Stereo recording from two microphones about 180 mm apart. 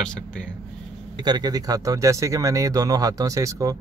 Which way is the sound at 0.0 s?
5° left (ahead or behind).